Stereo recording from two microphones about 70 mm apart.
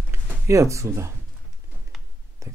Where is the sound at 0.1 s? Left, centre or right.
Right.